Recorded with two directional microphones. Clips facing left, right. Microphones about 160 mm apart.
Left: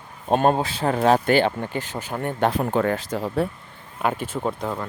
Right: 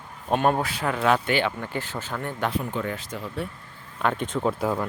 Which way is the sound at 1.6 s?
20° left (ahead or behind).